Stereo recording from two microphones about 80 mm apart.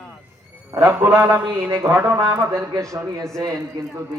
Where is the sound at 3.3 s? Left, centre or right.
Right.